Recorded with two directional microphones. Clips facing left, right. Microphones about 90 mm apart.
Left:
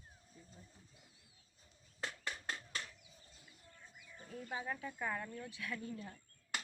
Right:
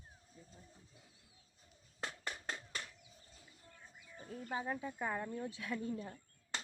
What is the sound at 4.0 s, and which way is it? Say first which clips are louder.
Speech: right 1 dB; 30° right (ahead or behind).